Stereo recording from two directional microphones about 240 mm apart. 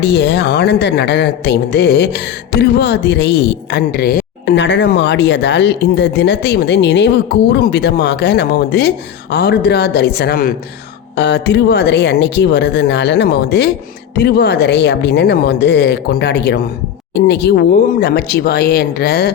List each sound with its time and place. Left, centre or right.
0.0 s speech: left